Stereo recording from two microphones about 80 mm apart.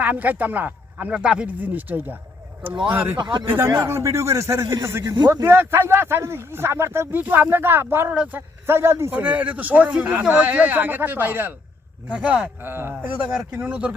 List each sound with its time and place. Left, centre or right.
0.0 s speech: right
7.2 s speech: right
8.1 s speech: centre
8.4 s speech: right
9.1 s speech: centre
12.0 s speech: centre
12.6 s speech: right
13.0 s speech: centre